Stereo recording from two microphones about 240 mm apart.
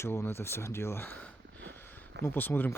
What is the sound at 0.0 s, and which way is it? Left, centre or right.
Speech, centre.